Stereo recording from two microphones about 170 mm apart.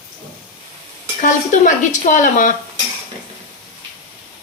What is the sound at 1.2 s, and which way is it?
Speech, 50° left (ahead or behind).